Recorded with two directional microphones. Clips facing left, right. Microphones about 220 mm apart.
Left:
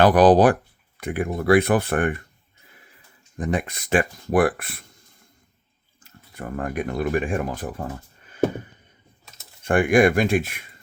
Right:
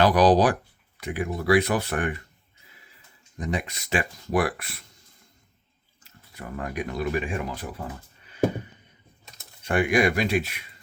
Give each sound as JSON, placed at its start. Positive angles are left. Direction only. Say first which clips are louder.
{"t": 0.0, "sound": "speech", "louder": "left 4 dB", "side_deg": 50}
{"t": 3.3, "sound": "speech", "louder": "left 4 dB", "side_deg": 50}
{"t": 6.0, "sound": "speech", "louder": "left 5 dB", "side_deg": 50}
{"t": 9.6, "sound": "speech", "louder": "left 5 dB", "side_deg": 50}